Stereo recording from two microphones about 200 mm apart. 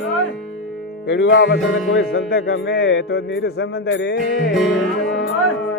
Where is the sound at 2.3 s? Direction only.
60° left (ahead or behind); by 3.3 s 80° left.